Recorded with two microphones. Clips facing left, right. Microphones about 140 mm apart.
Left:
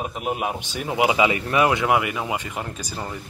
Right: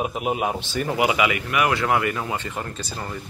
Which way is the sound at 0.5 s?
15° left (ahead or behind).